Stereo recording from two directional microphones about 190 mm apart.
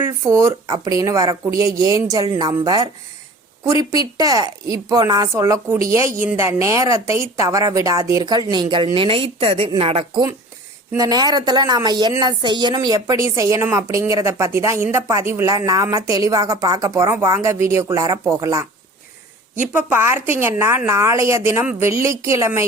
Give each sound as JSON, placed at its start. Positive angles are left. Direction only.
{"t": 0.3, "sound": "a woman's voice", "side_deg": -15}
{"t": 3.8, "sound": "speech", "side_deg": 25}
{"t": 4.2, "sound": "a woman's voice", "side_deg": -20}